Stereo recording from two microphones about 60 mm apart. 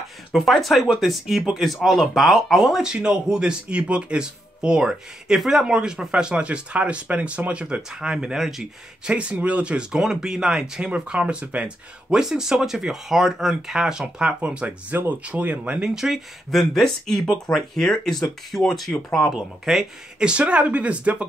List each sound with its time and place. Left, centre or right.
0.3 s speech: centre
9.1 s speech: centre
14.9 s speech: right
15.9 s speech: centre
16.4 s speech: centre
19.3 s speech: centre
20.2 s speech: centre